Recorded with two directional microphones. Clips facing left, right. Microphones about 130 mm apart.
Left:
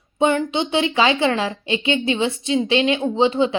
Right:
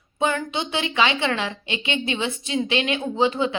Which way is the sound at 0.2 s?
30° left (ahead or behind).